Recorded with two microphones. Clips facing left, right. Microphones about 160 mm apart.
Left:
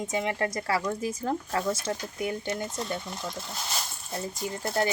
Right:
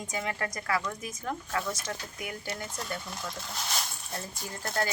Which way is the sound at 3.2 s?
Centre (ahead or behind).